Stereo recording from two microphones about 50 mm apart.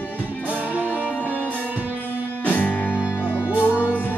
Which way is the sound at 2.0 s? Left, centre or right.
Left.